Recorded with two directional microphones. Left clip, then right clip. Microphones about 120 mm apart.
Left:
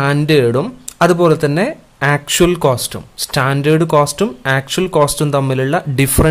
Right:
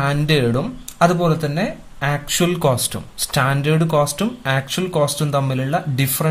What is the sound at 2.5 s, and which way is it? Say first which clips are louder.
Speech: left 4 dB; 35° left (ahead or behind).